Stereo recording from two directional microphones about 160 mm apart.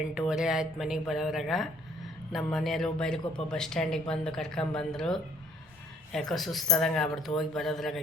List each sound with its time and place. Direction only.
0.1 s speech: 5° right (ahead or behind)